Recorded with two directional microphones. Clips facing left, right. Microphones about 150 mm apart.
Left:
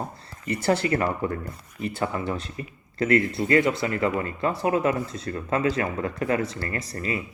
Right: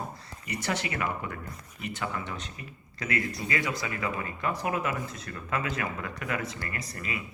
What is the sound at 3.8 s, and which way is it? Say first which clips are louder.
Speech: left 8 dB; 35° left (ahead or behind).